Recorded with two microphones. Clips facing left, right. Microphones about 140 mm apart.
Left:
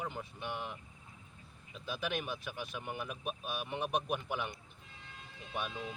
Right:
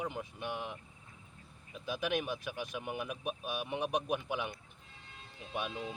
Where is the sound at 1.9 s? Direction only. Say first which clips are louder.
Right 3 dB; 15° right (ahead or behind).